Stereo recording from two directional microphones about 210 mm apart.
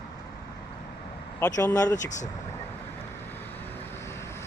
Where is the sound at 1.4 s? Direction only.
10° left (ahead or behind).